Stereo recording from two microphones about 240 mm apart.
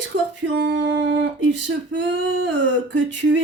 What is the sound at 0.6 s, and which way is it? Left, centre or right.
Singing, right.